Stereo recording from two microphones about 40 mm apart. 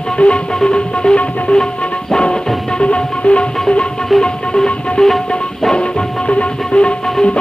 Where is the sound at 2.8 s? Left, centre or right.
Left.